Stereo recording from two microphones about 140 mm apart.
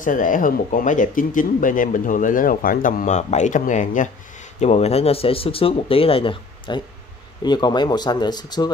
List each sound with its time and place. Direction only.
0.0 s speech: 70° left (ahead or behind)
4.6 s speech: 50° left (ahead or behind); by 8.7 s 30° left (ahead or behind)